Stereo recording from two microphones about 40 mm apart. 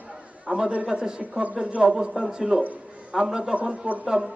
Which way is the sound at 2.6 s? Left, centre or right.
Right.